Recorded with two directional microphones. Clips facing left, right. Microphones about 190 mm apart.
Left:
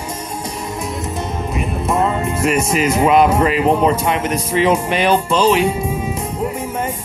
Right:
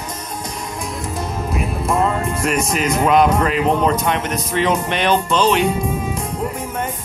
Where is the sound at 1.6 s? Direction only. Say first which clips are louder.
Left 1 dB; centre (ahead or behind).